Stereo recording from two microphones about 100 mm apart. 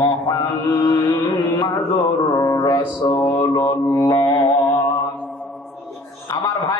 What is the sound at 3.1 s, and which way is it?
A man's voice, 35° left (ahead or behind).